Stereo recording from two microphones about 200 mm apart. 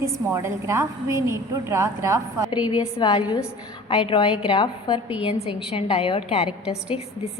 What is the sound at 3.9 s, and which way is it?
A woman's voice, 25° left (ahead or behind).